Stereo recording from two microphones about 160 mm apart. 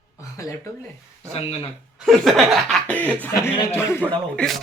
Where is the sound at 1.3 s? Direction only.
40° left (ahead or behind).